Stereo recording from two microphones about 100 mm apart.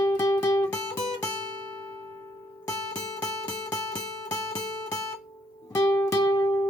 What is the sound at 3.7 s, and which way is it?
Music, 30° left (ahead or behind).